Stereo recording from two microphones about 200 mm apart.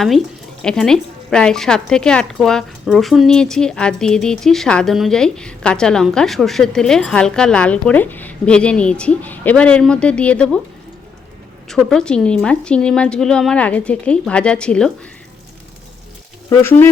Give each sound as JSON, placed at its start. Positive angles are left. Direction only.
{"t": 0.6, "sound": "a woman's voice", "side_deg": 5}
{"t": 11.7, "sound": "a woman's voice", "side_deg": 0}
{"t": 16.5, "sound": "speech", "side_deg": 10}